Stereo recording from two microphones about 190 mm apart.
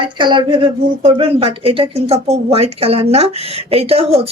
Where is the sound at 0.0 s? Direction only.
25° right (ahead or behind).